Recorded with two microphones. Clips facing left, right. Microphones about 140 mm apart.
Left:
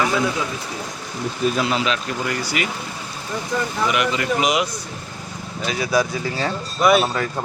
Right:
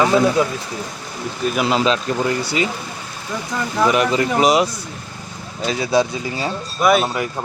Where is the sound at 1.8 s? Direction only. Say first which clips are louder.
Right 5 dB; 30° right (ahead or behind).